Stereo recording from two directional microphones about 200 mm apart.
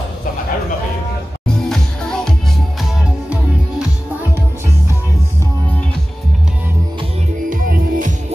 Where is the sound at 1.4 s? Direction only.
Centre (ahead or behind).